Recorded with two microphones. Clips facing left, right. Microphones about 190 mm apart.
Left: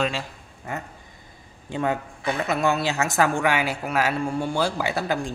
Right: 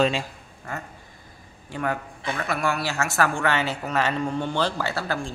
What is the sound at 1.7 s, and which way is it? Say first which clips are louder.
A woman's voice: left 3 dB; 25° left (ahead or behind).